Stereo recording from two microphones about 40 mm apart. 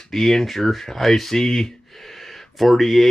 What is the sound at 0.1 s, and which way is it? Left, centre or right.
Speech, centre.